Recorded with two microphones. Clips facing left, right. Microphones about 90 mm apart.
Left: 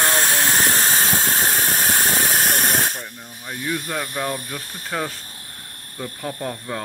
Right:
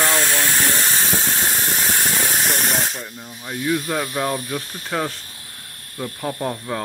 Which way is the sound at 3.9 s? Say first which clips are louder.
Right 3 dB; 10° right (ahead or behind).